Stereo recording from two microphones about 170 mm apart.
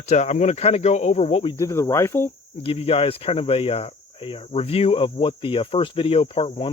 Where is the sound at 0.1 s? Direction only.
45° left (ahead or behind).